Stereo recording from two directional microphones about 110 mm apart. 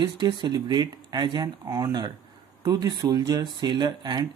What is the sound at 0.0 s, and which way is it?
Speech, 40° right (ahead or behind).